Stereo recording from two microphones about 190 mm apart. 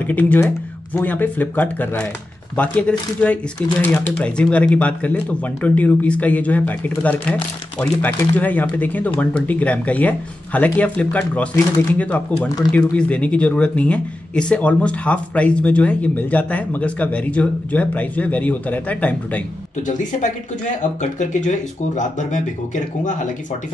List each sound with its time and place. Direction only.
0.0 s speech: 10° left (ahead or behind)
12.4 s speech: 20° left (ahead or behind)
12.9 s speech: 5° left (ahead or behind)
20.0 s speech: 40° left (ahead or behind)